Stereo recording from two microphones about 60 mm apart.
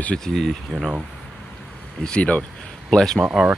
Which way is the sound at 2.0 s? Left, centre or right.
Left.